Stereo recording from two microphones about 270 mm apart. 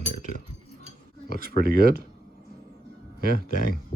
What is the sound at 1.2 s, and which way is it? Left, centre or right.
Speech, right.